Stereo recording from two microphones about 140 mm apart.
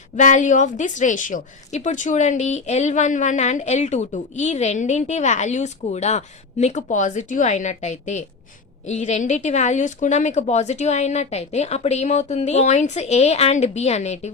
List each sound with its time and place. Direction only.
0.2 s a woman's voice: 60° left (ahead or behind)